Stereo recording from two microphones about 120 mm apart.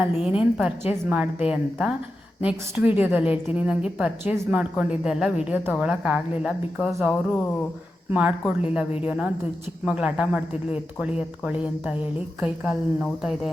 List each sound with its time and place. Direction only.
0.1 s a woman's voice: 55° left (ahead or behind)
0.5 s a woman's voice: 10° right (ahead or behind)
8.1 s a woman's voice: 10° right (ahead or behind)